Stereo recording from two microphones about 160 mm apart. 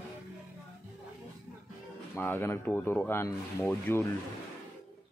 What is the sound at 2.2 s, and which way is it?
Speech, 15° left (ahead or behind).